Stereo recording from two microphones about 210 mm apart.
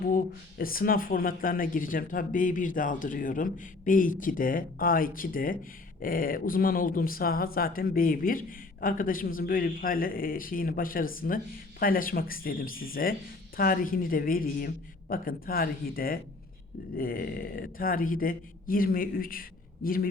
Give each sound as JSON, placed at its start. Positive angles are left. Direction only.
{"t": 0.6, "sound": "speech", "side_deg": 45}